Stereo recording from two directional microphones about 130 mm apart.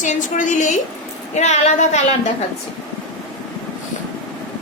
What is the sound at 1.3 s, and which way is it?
Speech, 65° left (ahead or behind).